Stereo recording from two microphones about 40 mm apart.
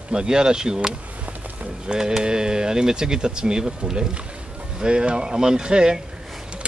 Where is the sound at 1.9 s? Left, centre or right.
Centre.